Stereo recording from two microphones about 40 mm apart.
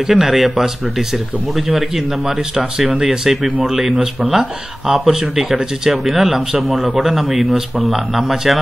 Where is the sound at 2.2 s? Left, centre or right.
Centre.